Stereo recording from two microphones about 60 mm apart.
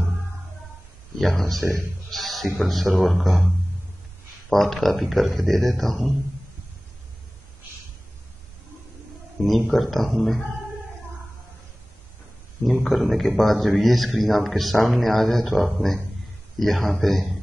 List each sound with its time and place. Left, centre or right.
1.1 s speech: centre
1.6 s speech: right
2.0 s music: centre
2.6 s speech: centre
4.5 s speech: centre
9.7 s speech: centre
12.8 s speech: centre